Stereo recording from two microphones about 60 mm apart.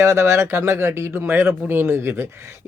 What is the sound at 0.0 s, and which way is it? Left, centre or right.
Speech, right.